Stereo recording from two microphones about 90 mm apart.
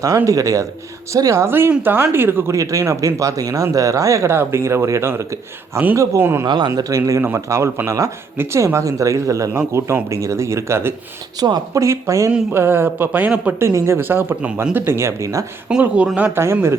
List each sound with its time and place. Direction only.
0.3 s speech: 40° right (ahead or behind)
2.6 s speech: 35° right (ahead or behind)
6.4 s speech: 55° right (ahead or behind)
6.7 s speech: 40° right (ahead or behind)
11.3 s speech: 50° right (ahead or behind)
11.8 s speech: 35° right (ahead or behind)
12.5 s speech: 25° right (ahead or behind)
13.7 s speech: 30° right (ahead or behind)
15.7 s speech: 15° right (ahead or behind)